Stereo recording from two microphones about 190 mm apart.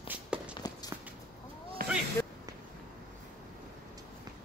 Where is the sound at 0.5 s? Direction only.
20° left (ahead or behind).